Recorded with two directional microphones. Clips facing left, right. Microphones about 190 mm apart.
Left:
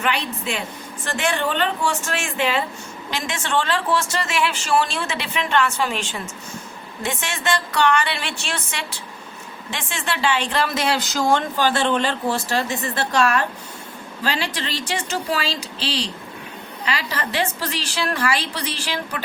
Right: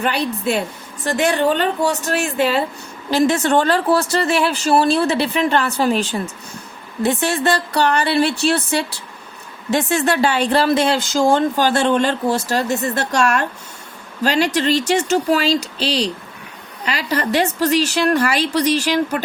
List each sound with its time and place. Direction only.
0.0 s a woman's voice: 35° right (ahead or behind)
9.6 s a woman's voice: 40° right (ahead or behind)
11.3 s a woman's voice: 40° right (ahead or behind)